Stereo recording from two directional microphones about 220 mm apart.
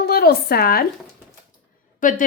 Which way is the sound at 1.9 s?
35° left (ahead or behind).